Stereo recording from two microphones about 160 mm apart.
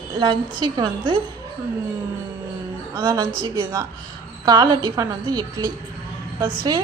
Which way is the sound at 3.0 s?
30° right (ahead or behind).